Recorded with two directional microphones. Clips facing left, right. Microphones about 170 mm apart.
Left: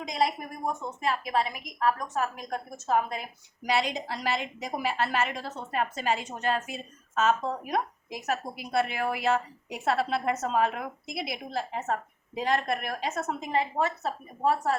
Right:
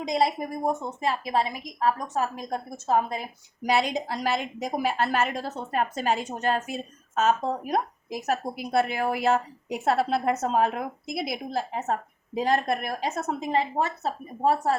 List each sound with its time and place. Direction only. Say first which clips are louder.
0.1 s a woman's voice: right 4 dB; 30° right (ahead or behind)